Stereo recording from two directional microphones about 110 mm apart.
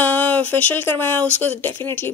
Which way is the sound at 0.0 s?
15° left (ahead or behind).